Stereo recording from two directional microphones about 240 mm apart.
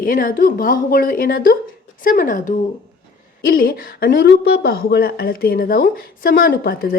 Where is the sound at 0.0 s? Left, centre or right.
Left.